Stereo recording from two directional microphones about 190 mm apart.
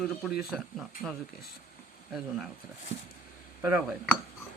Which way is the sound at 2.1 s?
5° right (ahead or behind).